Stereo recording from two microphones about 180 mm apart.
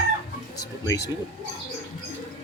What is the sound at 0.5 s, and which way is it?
Speech, 20° left (ahead or behind).